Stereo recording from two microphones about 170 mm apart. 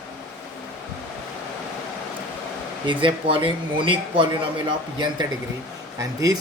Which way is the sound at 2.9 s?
30° right (ahead or behind).